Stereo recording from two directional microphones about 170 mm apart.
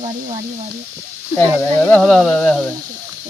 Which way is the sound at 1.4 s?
10° left (ahead or behind).